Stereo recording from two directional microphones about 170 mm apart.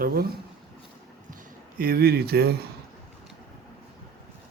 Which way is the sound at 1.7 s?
60° right (ahead or behind).